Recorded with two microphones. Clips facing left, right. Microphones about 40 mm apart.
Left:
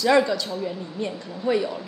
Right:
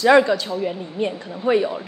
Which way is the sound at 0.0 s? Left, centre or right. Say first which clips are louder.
Right 5 dB; right.